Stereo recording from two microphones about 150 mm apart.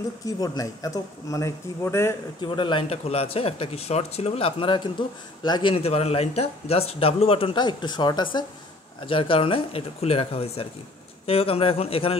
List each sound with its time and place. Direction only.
0.4 s a man's voice: 25° left (ahead or behind)
2.4 s speech: 30° left (ahead or behind)